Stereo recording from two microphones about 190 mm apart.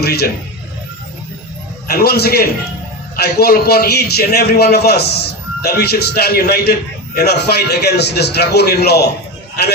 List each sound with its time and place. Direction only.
0.0 s a man's voice: 55° left (ahead or behind)
1.9 s a man's voice: 55° left (ahead or behind)